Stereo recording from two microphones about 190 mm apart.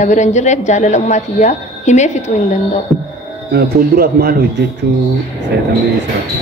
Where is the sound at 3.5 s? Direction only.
55° right (ahead or behind).